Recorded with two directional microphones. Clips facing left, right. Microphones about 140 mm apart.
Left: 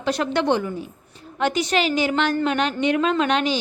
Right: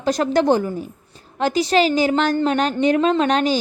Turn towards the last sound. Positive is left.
turn(degrees=-40)  # may be behind; listen again after turning